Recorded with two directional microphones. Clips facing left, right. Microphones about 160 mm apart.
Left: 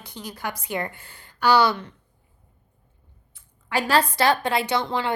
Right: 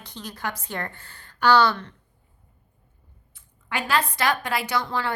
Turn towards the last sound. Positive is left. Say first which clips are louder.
# left 2 dB
turn(degrees=20)  # may be behind; listen again after turning